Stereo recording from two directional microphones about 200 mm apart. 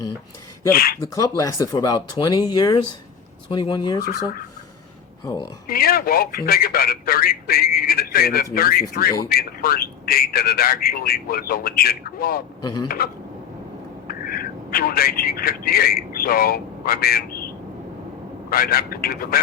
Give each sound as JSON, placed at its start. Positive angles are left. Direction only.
{"t": 0.7, "sound": "a man's voice", "side_deg": 50}
{"t": 1.4, "sound": "speech", "side_deg": 15}
{"t": 4.0, "sound": "a man's voice", "side_deg": 45}
{"t": 5.6, "sound": "a man's voice", "side_deg": 50}
{"t": 12.6, "sound": "speech", "side_deg": 20}
{"t": 14.1, "sound": "speech", "side_deg": 45}
{"t": 18.5, "sound": "a man's voice", "side_deg": 50}